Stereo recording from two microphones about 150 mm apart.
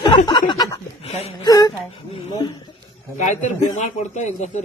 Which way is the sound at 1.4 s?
25° left (ahead or behind).